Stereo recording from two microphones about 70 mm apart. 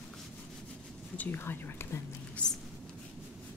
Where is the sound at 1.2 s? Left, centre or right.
Left.